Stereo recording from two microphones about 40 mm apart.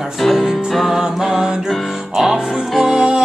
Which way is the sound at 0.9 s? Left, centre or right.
Centre.